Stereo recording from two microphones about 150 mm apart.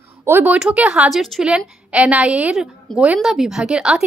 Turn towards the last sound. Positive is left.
turn(degrees=-5)  # may be behind; listen again after turning